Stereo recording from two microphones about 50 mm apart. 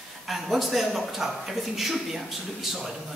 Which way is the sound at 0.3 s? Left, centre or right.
Centre.